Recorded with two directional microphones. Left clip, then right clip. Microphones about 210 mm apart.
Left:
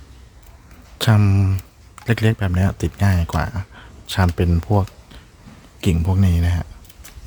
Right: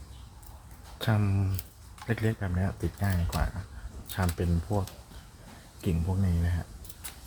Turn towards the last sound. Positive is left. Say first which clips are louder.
# left 11 dB
turn(degrees=60)  # may be behind; listen again after turning